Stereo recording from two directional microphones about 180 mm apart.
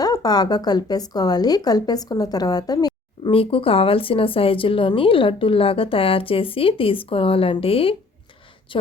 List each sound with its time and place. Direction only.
0.0 s a woman's voice: 20° left (ahead or behind)